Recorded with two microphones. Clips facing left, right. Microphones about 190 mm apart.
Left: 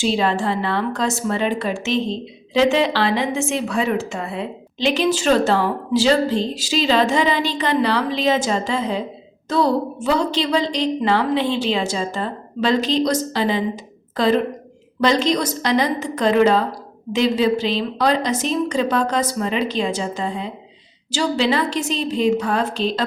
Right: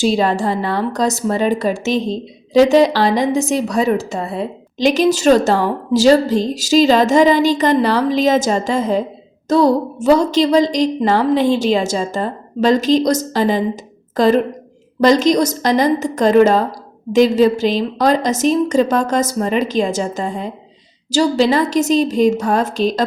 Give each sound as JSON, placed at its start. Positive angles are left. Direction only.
{"t": 0.0, "sound": "a woman's voice", "side_deg": -40}